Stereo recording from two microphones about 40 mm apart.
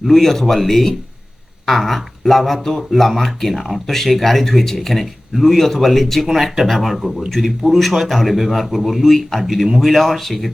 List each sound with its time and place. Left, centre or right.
0.0 s speech: centre
7.4 s speech: centre
7.7 s speech: centre